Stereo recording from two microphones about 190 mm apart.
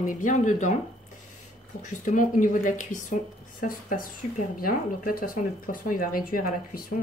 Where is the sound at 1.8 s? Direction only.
40° left (ahead or behind).